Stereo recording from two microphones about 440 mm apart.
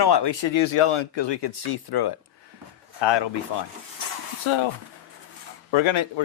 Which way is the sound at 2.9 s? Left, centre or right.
Left.